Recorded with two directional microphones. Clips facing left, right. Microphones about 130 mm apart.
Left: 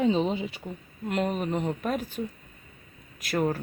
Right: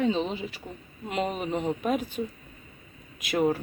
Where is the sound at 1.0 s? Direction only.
5° right (ahead or behind).